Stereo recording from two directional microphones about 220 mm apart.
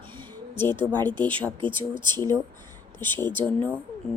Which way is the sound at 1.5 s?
20° right (ahead or behind).